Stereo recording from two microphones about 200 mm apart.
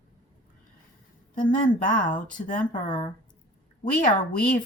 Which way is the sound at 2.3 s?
40° left (ahead or behind).